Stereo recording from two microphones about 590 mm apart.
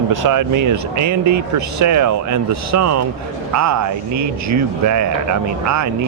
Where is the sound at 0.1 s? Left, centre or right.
Right.